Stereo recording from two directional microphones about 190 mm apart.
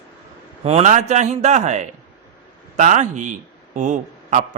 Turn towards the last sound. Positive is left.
turn(degrees=-40)  # may be behind; listen again after turning